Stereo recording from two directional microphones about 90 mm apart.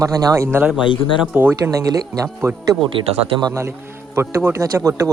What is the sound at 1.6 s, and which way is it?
A man's voice, 40° right (ahead or behind).